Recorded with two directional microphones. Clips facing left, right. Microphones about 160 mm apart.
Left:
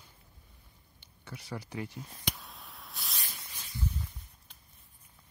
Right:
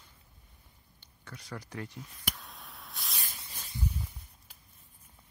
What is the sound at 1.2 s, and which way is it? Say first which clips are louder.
Speech: left 2 dB; 10° left (ahead or behind).